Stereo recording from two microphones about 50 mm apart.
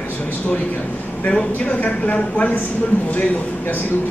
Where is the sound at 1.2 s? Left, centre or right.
Left.